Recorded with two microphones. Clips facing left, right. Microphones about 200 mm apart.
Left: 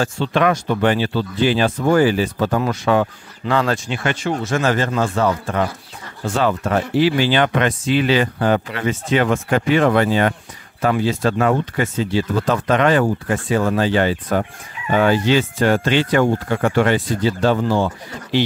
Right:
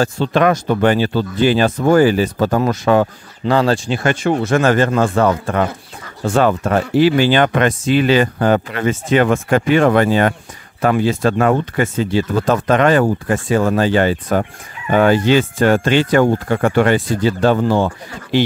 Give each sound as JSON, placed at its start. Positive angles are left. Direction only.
{"t": 0.0, "sound": "speech", "side_deg": -40}
{"t": 4.1, "sound": "speech", "side_deg": -55}